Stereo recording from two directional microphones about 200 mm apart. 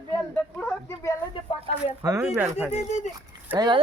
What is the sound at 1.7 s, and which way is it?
Speech, 30° left (ahead or behind).